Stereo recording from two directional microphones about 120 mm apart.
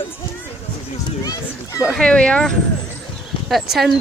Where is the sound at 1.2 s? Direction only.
30° left (ahead or behind).